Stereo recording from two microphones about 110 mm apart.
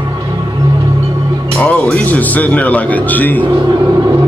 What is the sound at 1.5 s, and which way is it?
Speech, 10° left (ahead or behind).